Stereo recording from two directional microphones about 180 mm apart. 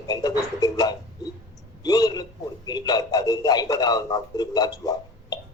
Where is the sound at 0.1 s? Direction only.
20° left (ahead or behind).